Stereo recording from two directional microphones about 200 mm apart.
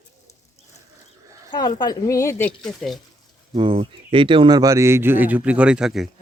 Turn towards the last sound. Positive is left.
turn(degrees=0)  # may be behind; listen again after turning